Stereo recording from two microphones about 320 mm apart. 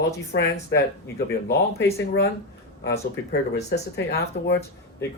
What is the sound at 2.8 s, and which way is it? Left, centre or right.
Speech, left.